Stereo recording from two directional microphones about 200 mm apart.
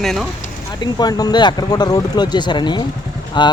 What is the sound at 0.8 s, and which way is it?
Speech, 20° left (ahead or behind).